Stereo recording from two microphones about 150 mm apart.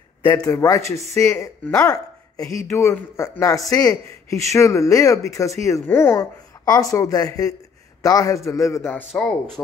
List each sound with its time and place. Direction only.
0.5 s speech: 20° left (ahead or behind)
6.6 s speech: 25° left (ahead or behind)